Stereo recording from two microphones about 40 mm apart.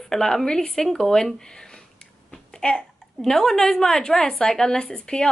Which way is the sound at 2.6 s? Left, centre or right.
Left.